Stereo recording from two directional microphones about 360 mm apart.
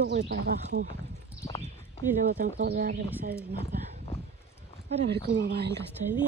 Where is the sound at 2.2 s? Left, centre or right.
Right.